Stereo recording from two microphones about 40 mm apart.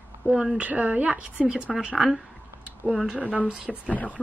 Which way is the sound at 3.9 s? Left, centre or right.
Left.